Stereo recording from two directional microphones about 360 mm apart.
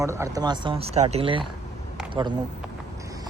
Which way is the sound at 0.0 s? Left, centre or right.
Centre.